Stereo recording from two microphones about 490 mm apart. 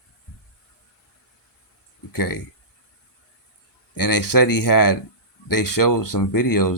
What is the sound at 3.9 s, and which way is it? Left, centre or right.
Speech, left.